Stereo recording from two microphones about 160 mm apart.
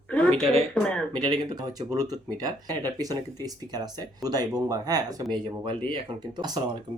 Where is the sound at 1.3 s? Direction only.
25° right (ahead or behind).